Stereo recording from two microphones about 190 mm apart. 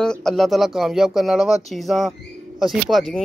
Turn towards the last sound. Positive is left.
turn(degrees=0)  # may be behind; listen again after turning